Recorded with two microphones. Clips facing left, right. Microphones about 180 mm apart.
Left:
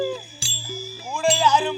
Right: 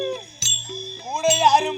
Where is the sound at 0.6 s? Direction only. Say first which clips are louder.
Even; 75° left (ahead or behind).